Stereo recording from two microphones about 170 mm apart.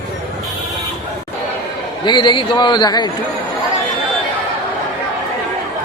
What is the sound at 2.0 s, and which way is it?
Speech, 25° left (ahead or behind).